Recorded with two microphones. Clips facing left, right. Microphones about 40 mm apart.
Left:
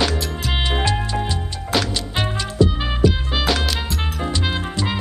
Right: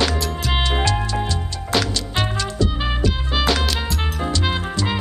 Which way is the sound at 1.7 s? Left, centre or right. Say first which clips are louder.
Even; centre.